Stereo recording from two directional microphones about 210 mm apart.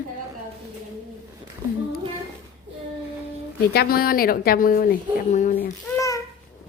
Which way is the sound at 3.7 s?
45° left (ahead or behind).